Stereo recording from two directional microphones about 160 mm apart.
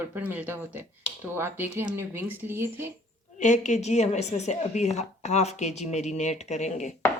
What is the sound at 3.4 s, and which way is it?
Speech, 50° left (ahead or behind).